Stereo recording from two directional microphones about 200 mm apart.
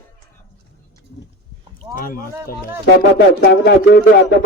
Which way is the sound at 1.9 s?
45° left (ahead or behind).